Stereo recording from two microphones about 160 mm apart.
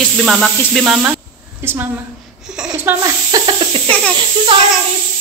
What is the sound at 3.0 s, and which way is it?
Hiss, 25° right (ahead or behind).